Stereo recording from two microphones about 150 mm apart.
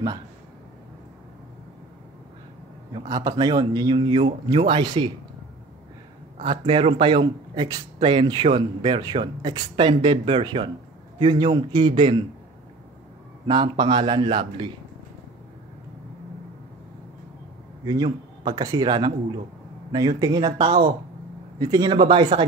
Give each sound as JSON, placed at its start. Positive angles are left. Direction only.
{"t": 2.9, "sound": "a man's voice", "side_deg": -25}
{"t": 6.4, "sound": "speech", "side_deg": -35}
{"t": 13.5, "sound": "speech", "side_deg": -30}
{"t": 17.8, "sound": "a man's voice", "side_deg": -30}